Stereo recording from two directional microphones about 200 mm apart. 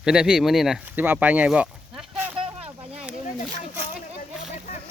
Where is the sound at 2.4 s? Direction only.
30° right (ahead or behind).